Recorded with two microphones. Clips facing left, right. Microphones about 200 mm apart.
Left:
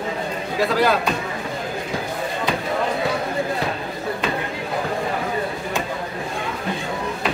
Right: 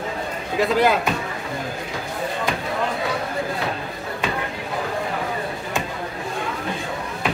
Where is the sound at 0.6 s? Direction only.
20° right (ahead or behind).